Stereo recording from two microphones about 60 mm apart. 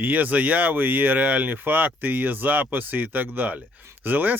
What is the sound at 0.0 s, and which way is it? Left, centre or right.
Speech, right.